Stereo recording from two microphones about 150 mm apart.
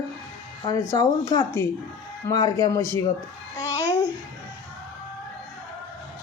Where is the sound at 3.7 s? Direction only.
15° left (ahead or behind).